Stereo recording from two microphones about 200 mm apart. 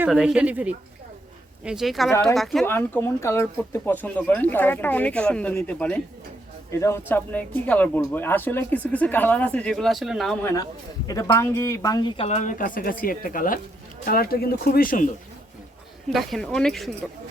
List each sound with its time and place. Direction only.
0.0 s a woman's voice: 5° right (ahead or behind)
2.6 s speech: 10° left (ahead or behind)
10.4 s a man's voice: 15° left (ahead or behind); by 15.1 s 45° left (ahead or behind)
16.0 s speech: centre (ahead or behind)